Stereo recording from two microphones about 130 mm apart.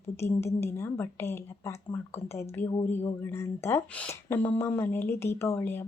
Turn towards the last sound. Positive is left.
turn(degrees=20)  # may be behind; listen again after turning